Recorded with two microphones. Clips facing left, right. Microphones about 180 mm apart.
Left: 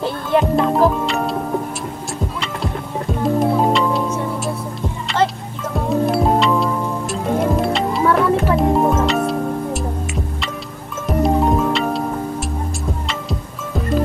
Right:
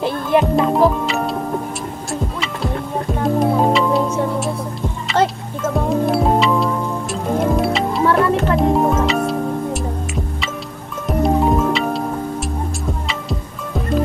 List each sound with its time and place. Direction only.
0.4 s speech: centre (ahead or behind)
2.4 s music: centre (ahead or behind)
5.9 s music: centre (ahead or behind)
13.0 s music: centre (ahead or behind)